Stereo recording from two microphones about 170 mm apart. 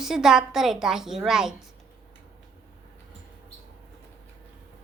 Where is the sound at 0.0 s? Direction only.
5° right (ahead or behind).